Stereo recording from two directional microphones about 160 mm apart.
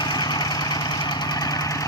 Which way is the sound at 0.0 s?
25° left (ahead or behind).